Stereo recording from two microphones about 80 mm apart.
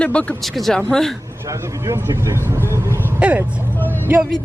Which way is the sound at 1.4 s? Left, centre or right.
Right.